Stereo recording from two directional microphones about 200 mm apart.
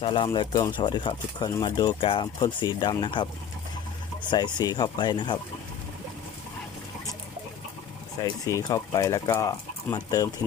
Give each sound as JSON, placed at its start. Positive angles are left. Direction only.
{"t": 0.0, "sound": "speech", "side_deg": 25}
{"t": 4.3, "sound": "speech", "side_deg": 20}
{"t": 8.2, "sound": "speech", "side_deg": 15}